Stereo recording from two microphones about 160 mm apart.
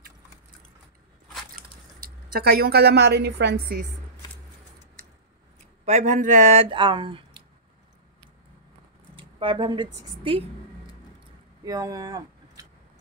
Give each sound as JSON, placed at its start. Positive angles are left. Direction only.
{"t": 2.0, "sound": "a woman's voice", "side_deg": -75}
{"t": 5.9, "sound": "speech", "side_deg": -50}
{"t": 9.1, "sound": "a sound", "side_deg": -35}
{"t": 10.0, "sound": "speech", "side_deg": -35}
{"t": 11.6, "sound": "speech", "side_deg": -20}